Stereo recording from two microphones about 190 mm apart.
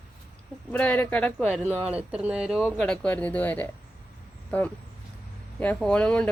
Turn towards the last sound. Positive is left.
turn(degrees=5)  # may be behind; listen again after turning